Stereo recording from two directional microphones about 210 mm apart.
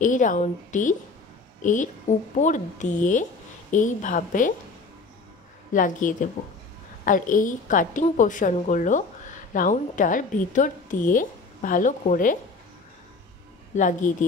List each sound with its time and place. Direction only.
0.0 s a woman's voice: 35° left (ahead or behind)
5.7 s a woman's voice: 40° left (ahead or behind)
13.7 s a woman's voice: 35° left (ahead or behind)